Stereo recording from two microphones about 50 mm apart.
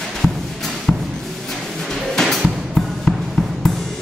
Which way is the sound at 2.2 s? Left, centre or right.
Centre.